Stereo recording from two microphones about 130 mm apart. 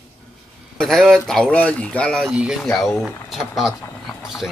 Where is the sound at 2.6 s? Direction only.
5° left (ahead or behind).